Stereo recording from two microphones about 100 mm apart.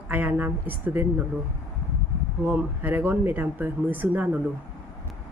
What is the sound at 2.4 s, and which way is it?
Speech, 20° right (ahead or behind).